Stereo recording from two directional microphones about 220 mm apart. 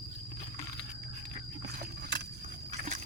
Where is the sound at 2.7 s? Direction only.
35° right (ahead or behind).